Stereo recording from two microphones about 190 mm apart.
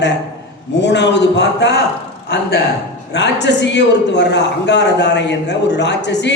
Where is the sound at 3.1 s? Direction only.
65° left (ahead or behind).